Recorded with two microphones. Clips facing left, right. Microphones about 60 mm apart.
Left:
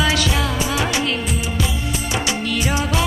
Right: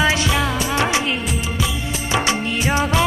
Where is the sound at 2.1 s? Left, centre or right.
Right.